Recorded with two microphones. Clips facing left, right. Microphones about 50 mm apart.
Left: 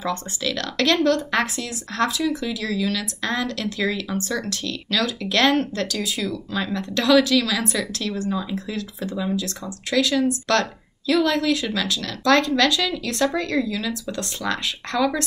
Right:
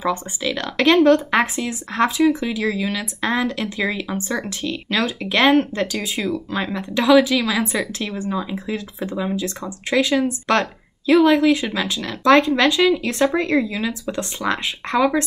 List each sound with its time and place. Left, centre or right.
0.0 s speech: centre